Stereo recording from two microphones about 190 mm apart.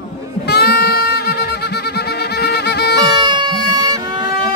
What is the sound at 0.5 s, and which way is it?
Music, 55° left (ahead or behind).